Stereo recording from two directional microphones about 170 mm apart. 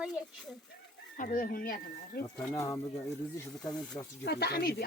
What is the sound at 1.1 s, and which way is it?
Speech, 55° left (ahead or behind).